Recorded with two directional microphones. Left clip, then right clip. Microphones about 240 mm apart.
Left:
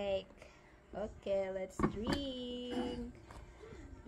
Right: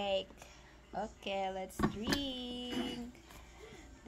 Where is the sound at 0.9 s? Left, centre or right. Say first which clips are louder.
Left 1 dB; right.